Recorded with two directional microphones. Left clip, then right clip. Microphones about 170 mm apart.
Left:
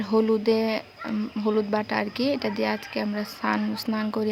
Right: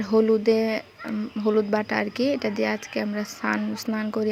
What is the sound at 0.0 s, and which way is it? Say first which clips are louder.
Speech: right 2 dB; 15° right (ahead or behind).